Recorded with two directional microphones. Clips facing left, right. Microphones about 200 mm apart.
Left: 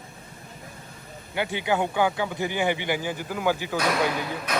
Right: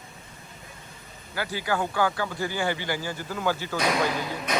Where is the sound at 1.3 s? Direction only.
20° left (ahead or behind).